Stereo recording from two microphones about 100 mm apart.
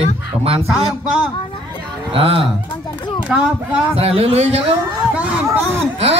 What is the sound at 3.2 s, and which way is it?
Speech, 15° right (ahead or behind).